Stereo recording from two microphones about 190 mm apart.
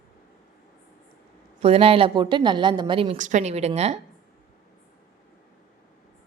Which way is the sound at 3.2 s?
40° right (ahead or behind).